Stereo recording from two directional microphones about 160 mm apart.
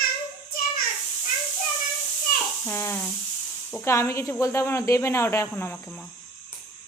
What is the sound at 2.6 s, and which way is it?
Speech, 15° left (ahead or behind).